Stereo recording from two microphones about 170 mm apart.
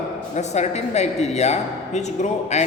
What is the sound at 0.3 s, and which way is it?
A man's voice, 40° left (ahead or behind).